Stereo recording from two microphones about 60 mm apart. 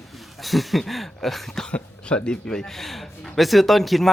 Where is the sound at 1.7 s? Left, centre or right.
Centre.